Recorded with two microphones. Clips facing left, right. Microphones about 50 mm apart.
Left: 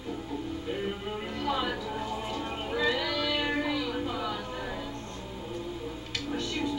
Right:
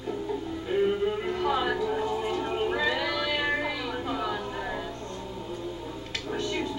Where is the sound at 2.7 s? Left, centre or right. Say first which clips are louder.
Right 1 dB; centre.